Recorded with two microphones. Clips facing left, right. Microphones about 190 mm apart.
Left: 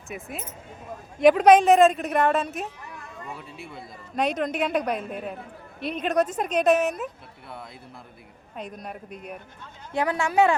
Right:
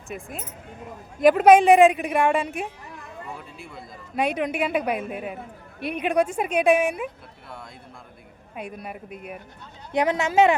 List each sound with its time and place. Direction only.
0.1 s a woman's voice: 5° left (ahead or behind)
4.4 s a woman's voice: 10° right (ahead or behind)
8.5 s speech: 5° right (ahead or behind)
9.9 s speech: 20° right (ahead or behind)